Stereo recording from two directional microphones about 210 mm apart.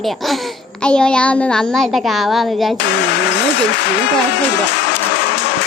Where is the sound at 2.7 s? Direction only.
55° left (ahead or behind).